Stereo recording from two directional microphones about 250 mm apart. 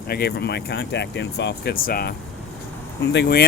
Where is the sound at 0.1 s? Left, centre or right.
Left.